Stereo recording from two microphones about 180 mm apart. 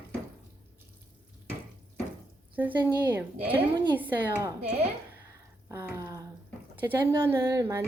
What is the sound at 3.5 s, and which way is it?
Speech, 25° right (ahead or behind).